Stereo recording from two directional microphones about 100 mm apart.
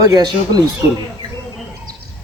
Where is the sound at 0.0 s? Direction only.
40° right (ahead or behind).